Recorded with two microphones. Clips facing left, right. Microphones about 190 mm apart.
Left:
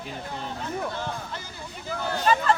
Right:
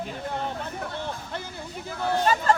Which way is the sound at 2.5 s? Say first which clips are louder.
Right 3 dB; 40° right (ahead or behind).